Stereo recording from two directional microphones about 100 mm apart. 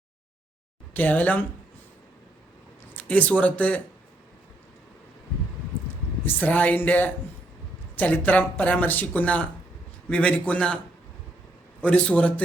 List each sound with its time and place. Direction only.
0.9 s speech: 15° left (ahead or behind)
2.9 s speech: 15° left (ahead or behind)
6.2 s speech: 15° left (ahead or behind)
11.8 s speech: 10° left (ahead or behind)